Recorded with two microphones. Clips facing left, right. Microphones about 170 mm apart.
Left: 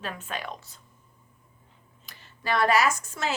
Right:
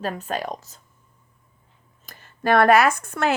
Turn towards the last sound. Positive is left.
turn(degrees=-60)  # may be behind; listen again after turning